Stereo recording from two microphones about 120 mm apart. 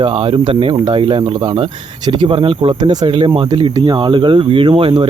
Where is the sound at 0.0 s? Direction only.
50° right (ahead or behind); by 3.1 s 35° right (ahead or behind).